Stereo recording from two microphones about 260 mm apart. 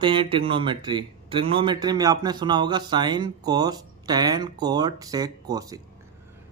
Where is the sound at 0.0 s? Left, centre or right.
Centre.